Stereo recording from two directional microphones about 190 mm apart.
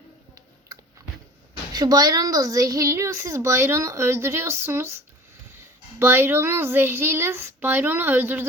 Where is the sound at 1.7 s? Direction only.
20° right (ahead or behind).